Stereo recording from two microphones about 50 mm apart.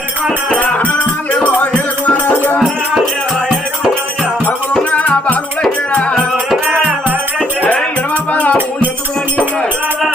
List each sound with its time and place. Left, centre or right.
0.5 s music: left
4.8 s music: left
7.6 s music: left